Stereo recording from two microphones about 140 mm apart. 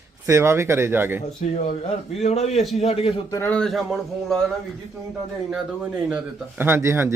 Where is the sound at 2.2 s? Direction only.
50° left (ahead or behind).